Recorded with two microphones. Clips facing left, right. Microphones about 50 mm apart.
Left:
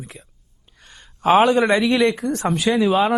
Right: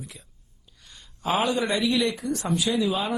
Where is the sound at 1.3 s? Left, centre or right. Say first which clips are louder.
Left 9 dB; left.